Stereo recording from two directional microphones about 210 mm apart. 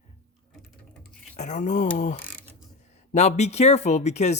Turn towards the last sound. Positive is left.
turn(degrees=30)  # may be behind; listen again after turning